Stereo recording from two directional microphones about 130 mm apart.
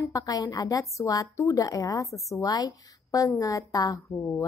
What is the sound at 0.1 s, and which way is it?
A woman's voice, 25° left (ahead or behind).